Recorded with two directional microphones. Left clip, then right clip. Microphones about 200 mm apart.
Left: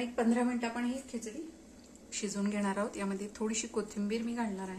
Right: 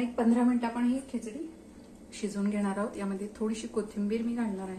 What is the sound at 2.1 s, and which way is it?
Speech, 25° left (ahead or behind).